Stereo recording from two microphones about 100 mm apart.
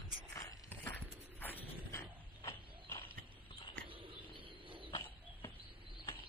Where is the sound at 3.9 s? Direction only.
60° right (ahead or behind).